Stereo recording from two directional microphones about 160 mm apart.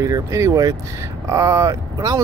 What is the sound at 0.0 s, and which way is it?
Speech, 20° right (ahead or behind).